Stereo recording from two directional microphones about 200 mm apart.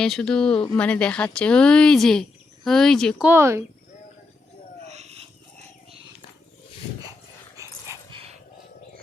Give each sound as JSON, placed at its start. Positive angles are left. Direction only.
{"t": 0.0, "sound": "a woman's voice", "side_deg": 5}
{"t": 3.2, "sound": "speech", "side_deg": -15}
{"t": 4.9, "sound": "a sound", "side_deg": -35}
{"t": 7.5, "sound": "dog", "side_deg": -15}